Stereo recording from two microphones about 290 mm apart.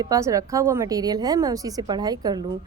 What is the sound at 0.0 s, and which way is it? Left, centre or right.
Speech, centre.